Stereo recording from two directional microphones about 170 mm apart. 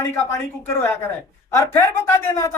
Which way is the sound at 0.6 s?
15° left (ahead or behind).